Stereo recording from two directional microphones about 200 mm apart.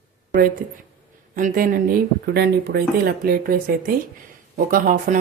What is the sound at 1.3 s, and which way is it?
Speech, 45° right (ahead or behind).